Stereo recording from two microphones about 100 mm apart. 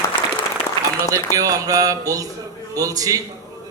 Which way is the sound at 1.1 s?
35° right (ahead or behind).